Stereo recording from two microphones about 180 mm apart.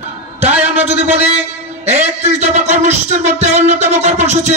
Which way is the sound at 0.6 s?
35° right (ahead or behind).